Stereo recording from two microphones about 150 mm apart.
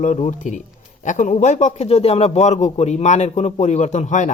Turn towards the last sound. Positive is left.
turn(degrees=55)  # may be behind; listen again after turning